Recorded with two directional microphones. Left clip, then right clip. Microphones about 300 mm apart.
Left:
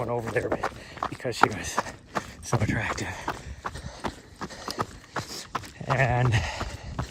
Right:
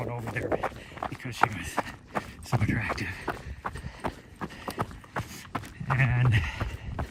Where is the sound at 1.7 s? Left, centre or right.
Centre.